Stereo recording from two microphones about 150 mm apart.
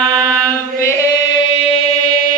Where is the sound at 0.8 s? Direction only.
25° left (ahead or behind); by 1.9 s 40° left (ahead or behind).